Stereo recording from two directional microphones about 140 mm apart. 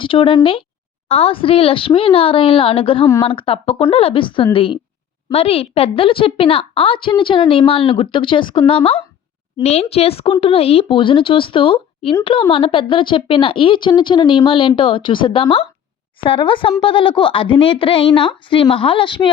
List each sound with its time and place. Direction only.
0.0 s a woman's voice: 40° left (ahead or behind)